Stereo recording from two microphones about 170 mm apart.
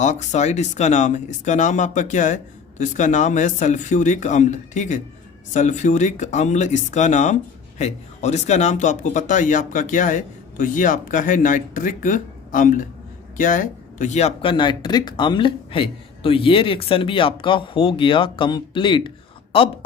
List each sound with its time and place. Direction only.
0.0 s speech: 45° left (ahead or behind)